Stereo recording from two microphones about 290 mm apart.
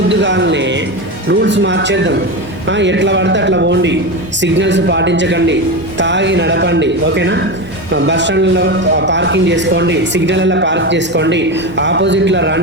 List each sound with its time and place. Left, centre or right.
0.1 s a man's voice: right